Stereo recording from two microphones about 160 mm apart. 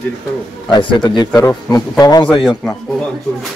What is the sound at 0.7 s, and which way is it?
Speech, 30° left (ahead or behind).